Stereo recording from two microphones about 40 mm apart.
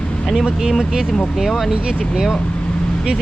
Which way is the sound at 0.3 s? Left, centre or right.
Centre.